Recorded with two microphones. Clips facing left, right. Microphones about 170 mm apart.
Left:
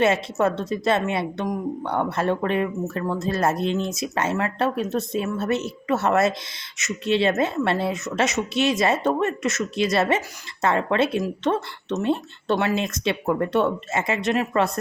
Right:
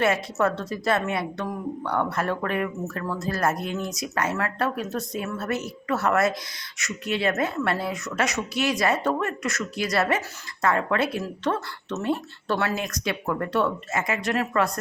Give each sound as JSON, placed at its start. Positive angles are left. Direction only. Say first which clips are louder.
{"t": 0.0, "sound": "a woman's voice", "louder": "left 3 dB", "side_deg": 20}